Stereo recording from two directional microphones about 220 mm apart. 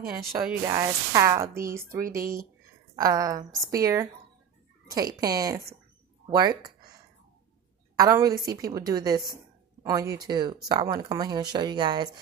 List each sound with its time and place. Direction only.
0.3 s speech: 10° right (ahead or behind)
2.0 s speech: 40° right (ahead or behind)
3.0 s speech: 15° right (ahead or behind)
7.9 s a woman's voice: 15° right (ahead or behind)